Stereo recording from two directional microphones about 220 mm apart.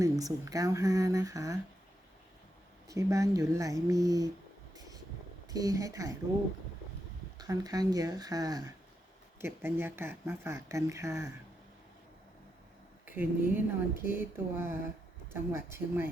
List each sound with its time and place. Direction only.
0.0 s speech: 15° right (ahead or behind)
2.9 s speech: 15° right (ahead or behind)
4.7 s vehicle: 15° right (ahead or behind)
5.5 s speech: 15° right (ahead or behind)
7.3 s speech: 15° right (ahead or behind)
13.1 s speech: 10° right (ahead or behind)